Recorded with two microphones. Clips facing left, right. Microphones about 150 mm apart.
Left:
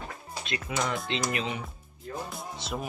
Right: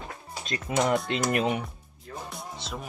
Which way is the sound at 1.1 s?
55° right (ahead or behind).